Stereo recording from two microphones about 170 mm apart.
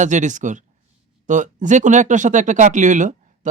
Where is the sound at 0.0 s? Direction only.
45° right (ahead or behind).